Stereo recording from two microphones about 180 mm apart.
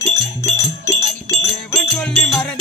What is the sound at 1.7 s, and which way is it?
Music, centre (ahead or behind).